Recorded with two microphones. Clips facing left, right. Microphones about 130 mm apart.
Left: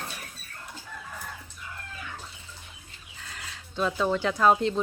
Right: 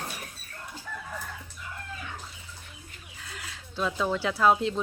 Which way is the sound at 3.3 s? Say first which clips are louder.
Left 1 dB; centre (ahead or behind).